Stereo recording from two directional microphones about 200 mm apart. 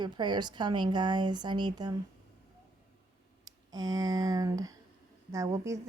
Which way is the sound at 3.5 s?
20° right (ahead or behind).